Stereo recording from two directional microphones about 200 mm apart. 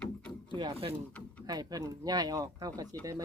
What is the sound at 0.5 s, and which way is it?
A woman's voice, 25° right (ahead or behind).